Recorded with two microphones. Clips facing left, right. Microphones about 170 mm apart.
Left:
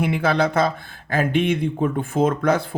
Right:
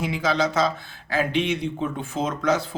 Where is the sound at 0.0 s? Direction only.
60° left (ahead or behind).